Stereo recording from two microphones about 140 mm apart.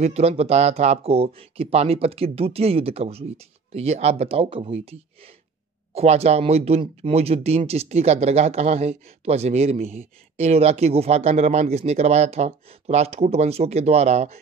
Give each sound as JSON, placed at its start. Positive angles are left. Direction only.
{"t": 0.0, "sound": "speech", "side_deg": -50}